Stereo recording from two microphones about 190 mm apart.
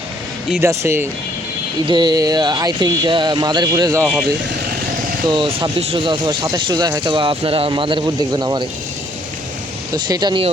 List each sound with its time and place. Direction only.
0.6 s speech: 15° right (ahead or behind)
4.0 s speech: centre (ahead or behind)
5.3 s speech: 25° right (ahead or behind)
9.9 s speech: 20° right (ahead or behind)